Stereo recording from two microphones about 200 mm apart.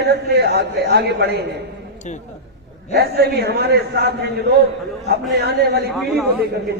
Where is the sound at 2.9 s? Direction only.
55° right (ahead or behind).